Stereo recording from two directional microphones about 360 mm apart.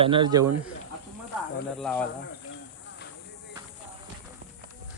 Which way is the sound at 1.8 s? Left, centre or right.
Centre.